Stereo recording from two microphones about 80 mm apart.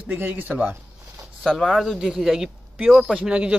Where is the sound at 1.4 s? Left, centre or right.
Centre.